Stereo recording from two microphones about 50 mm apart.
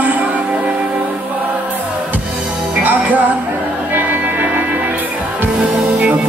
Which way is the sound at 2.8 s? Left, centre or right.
Right.